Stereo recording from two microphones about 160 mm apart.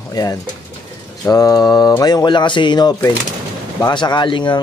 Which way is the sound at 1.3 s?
25° left (ahead or behind).